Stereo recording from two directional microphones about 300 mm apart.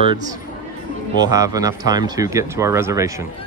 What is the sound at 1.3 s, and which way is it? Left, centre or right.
Speech, centre.